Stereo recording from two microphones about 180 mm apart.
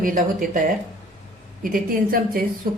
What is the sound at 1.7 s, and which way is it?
Speech, 55° right (ahead or behind).